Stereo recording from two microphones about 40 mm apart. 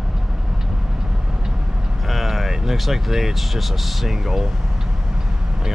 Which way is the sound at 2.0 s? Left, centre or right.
Centre.